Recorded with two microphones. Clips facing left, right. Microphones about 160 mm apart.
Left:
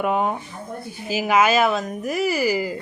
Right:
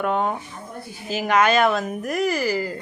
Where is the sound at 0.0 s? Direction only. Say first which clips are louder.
Left 1 dB; 10° left (ahead or behind).